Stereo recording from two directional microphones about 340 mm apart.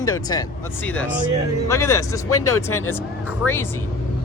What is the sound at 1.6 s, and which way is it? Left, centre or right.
Speech, centre.